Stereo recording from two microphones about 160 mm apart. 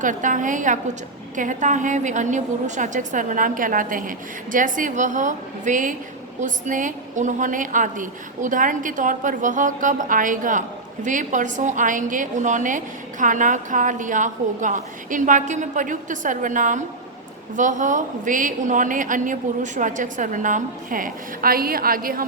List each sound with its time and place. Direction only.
0.0 s a woman's voice: 55° right (ahead or behind)